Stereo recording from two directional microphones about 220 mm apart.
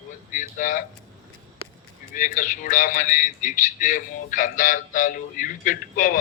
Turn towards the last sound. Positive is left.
turn(degrees=40)  # may be behind; listen again after turning